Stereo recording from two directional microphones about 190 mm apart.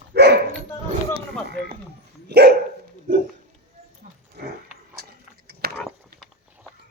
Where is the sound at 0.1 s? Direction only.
60° right (ahead or behind).